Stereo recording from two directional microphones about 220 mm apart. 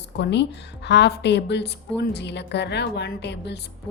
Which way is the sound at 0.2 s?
50° left (ahead or behind).